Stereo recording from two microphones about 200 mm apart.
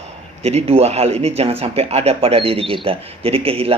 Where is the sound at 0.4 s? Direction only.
30° right (ahead or behind).